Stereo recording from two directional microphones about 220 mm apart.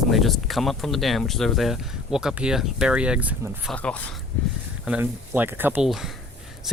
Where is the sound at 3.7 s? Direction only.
5° left (ahead or behind).